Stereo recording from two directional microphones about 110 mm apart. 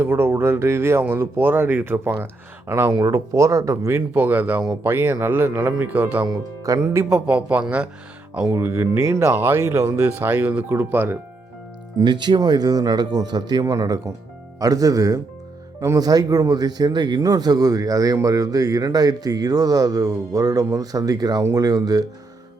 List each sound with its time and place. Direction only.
0.0 s speech: 20° right (ahead or behind)
4.1 s speech: 15° right (ahead or behind)
6.2 s speech: 35° right (ahead or behind)
7.3 s speech: 10° right (ahead or behind)
8.5 s speech: 20° right (ahead or behind)
11.9 s speech: 45° right (ahead or behind)